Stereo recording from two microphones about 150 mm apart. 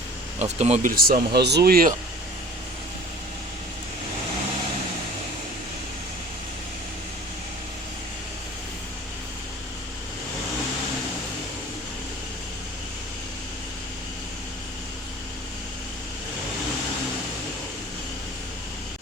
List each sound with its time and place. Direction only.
0.3 s speech: 45° right (ahead or behind)
0.9 s speech: 70° right (ahead or behind); by 1.9 s 90° right